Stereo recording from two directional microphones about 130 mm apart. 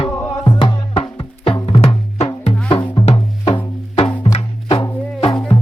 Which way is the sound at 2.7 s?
40° left (ahead or behind).